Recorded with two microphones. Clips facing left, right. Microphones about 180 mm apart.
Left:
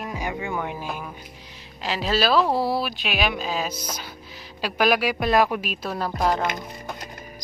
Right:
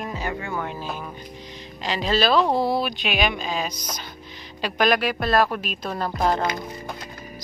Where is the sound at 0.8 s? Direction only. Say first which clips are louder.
Even; 5° left (ahead or behind).